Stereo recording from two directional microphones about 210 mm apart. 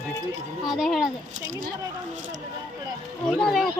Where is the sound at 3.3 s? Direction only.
Centre (ahead or behind).